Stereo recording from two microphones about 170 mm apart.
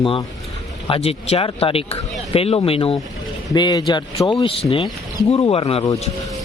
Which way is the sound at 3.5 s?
25° left (ahead or behind).